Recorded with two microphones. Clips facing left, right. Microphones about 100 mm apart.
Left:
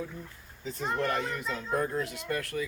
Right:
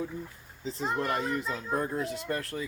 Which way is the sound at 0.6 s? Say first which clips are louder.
Even; 30° right (ahead or behind).